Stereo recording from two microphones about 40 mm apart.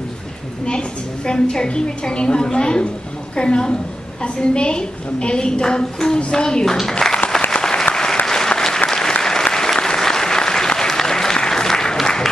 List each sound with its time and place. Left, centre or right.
0.7 s a woman's voice: left
7.5 s applause: left